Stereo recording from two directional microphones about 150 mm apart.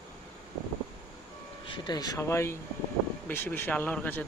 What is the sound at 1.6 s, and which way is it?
Speech, 30° left (ahead or behind).